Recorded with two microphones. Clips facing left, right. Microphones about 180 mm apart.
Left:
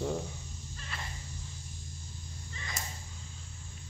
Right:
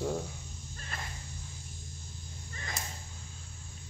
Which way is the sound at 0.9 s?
50° right (ahead or behind).